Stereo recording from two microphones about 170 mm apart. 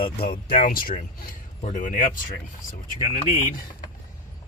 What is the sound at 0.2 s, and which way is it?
Speech, 55° left (ahead or behind).